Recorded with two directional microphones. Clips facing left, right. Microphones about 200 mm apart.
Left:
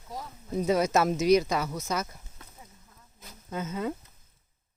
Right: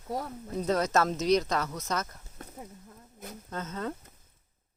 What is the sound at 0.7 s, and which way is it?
Speech, 10° left (ahead or behind).